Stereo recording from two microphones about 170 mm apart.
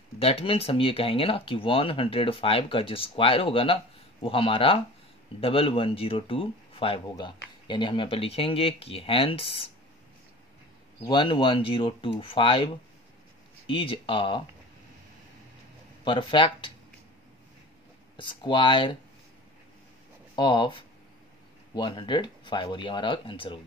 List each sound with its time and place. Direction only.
0.2 s speech: 35° left (ahead or behind)
11.1 s speech: 30° left (ahead or behind)
16.0 s speech: 30° left (ahead or behind)
18.1 s speech: 30° left (ahead or behind)
20.3 s speech: 30° left (ahead or behind)